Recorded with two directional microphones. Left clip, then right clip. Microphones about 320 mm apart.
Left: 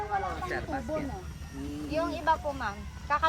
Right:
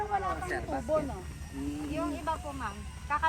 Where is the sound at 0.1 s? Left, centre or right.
Right.